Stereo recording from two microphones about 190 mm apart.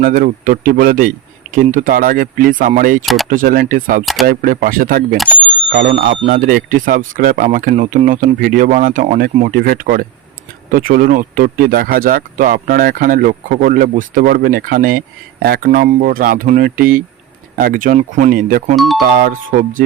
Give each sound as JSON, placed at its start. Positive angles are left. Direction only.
{"t": 0.0, "sound": "speech", "side_deg": -45}
{"t": 4.0, "sound": "speech", "side_deg": 0}
{"t": 4.3, "sound": "speech", "side_deg": -45}
{"t": 5.1, "sound": "speech", "side_deg": 0}
{"t": 6.3, "sound": "speech", "side_deg": -45}